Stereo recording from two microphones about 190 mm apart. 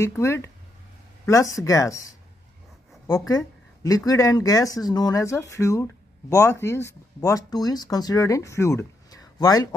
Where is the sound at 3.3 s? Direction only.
20° left (ahead or behind).